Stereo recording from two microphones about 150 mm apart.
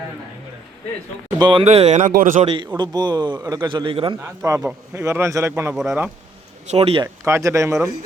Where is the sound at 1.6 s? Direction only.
45° right (ahead or behind); by 2.4 s 60° right (ahead or behind).